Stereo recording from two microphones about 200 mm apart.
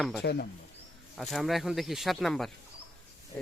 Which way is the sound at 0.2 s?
55° left (ahead or behind).